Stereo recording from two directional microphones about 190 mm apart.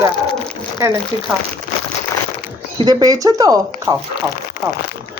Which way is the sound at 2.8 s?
20° right (ahead or behind).